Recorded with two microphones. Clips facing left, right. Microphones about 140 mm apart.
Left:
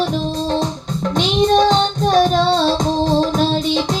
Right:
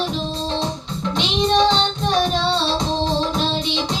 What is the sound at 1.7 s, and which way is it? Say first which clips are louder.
Music: left 5 dB; 45° left (ahead or behind).